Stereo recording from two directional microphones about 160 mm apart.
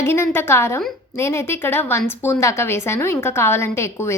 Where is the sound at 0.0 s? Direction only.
15° left (ahead or behind).